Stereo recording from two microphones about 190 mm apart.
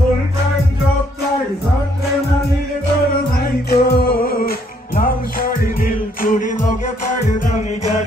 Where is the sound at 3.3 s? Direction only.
55° left (ahead or behind).